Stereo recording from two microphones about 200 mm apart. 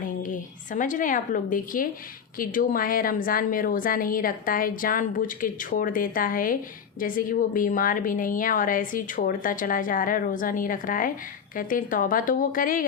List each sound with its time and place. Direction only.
0.2 s a woman's voice: 40° left (ahead or behind)